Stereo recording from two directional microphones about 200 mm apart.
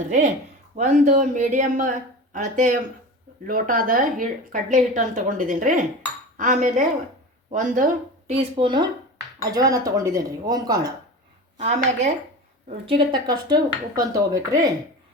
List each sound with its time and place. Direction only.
0.0 s a woman's voice: 35° right (ahead or behind); by 10.9 s 20° right (ahead or behind)
11.5 s a woman's voice: 35° right (ahead or behind); by 14.7 s 20° right (ahead or behind)